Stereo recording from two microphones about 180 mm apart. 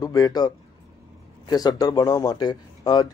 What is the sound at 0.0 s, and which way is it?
Speech, 20° left (ahead or behind).